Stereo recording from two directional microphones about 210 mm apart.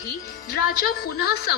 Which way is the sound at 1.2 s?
50° left (ahead or behind).